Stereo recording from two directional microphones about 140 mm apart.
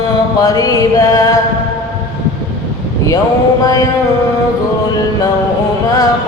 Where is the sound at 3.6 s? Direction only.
25° left (ahead or behind).